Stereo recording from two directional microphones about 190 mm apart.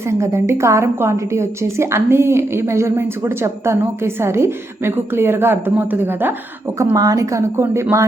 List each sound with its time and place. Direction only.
0.0 s a woman's voice: 15° right (ahead or behind)